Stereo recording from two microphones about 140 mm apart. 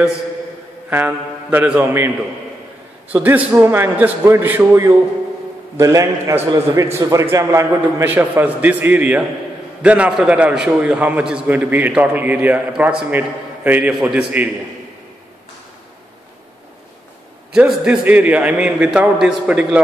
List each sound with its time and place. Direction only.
0.8 s a man's voice: 15° right (ahead or behind)
3.1 s a man's voice: 10° right (ahead or behind)
17.5 s a man's voice: 10° right (ahead or behind)